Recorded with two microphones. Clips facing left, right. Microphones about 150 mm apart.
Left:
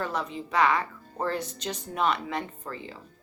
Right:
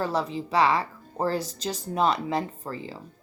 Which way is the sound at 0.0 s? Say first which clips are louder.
Right 4 dB; 35° right (ahead or behind).